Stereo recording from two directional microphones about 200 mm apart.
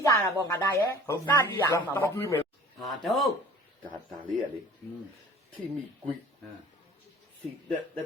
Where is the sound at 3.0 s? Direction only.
Centre (ahead or behind).